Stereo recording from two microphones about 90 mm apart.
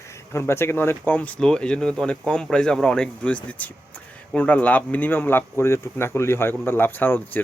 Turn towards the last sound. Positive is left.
turn(degrees=20)  # may be behind; listen again after turning